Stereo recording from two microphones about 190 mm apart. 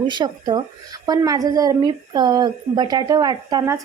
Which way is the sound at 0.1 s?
25° right (ahead or behind).